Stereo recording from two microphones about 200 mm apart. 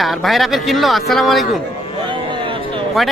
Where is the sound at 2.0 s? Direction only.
25° right (ahead or behind).